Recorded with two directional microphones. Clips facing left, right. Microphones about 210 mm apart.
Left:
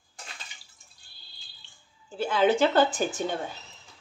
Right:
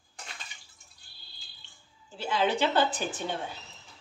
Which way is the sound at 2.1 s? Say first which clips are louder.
Left 5 dB; 50° left (ahead or behind).